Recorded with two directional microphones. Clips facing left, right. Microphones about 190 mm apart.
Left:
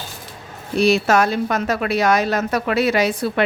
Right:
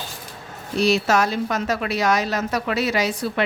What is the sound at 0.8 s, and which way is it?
A woman's voice, 55° left (ahead or behind).